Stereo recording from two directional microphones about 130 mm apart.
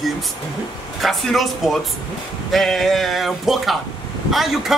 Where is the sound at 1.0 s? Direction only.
Centre (ahead or behind).